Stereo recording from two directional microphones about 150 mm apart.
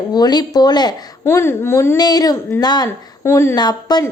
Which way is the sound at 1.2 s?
15° left (ahead or behind).